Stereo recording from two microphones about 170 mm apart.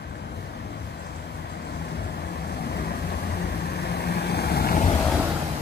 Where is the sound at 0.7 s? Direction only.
75° left (ahead or behind).